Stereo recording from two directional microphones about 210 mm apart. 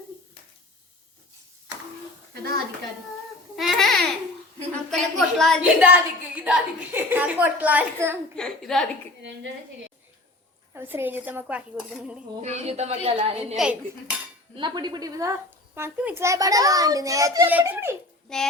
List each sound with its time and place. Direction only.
2.3 s dishes: 45° right (ahead or behind)
3.5 s babbling: centre (ahead or behind)
4.9 s a child's voice: centre (ahead or behind)
8.4 s dishes: 5° left (ahead or behind)
10.8 s a child's voice: 10° right (ahead or behind)
12.4 s a woman's voice: 30° right (ahead or behind)
13.6 s dishes: 5° right (ahead or behind)
14.5 s a child's voice: 20° right (ahead or behind)
18.3 s dishes: 5° left (ahead or behind)